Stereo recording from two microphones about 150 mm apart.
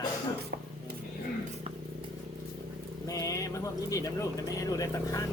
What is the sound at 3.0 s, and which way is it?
Speech, 25° left (ahead or behind).